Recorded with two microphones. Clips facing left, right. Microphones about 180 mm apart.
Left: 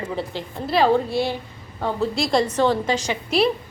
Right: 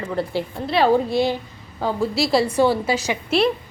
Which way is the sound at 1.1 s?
15° right (ahead or behind).